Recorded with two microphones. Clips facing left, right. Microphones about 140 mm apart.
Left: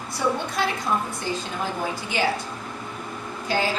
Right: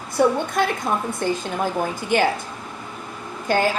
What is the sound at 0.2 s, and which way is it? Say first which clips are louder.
A woman's voice: right 6 dB; 55° right (ahead or behind).